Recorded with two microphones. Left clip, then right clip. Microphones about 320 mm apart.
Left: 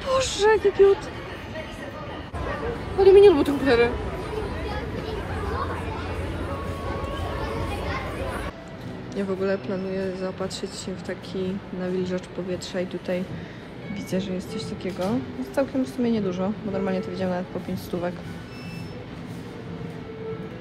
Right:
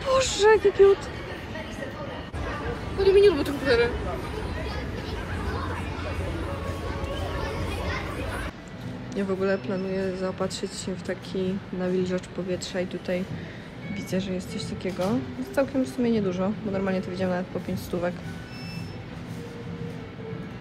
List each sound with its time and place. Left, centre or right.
0.0 s vehicle: centre
3.0 s speech: centre
9.1 s speech: centre